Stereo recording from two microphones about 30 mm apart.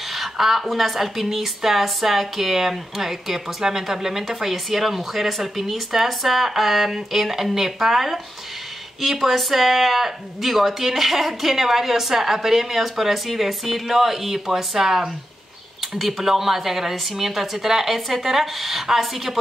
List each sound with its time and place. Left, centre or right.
0.1 s speech: centre